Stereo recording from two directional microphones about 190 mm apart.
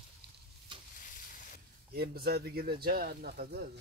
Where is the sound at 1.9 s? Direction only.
55° right (ahead or behind).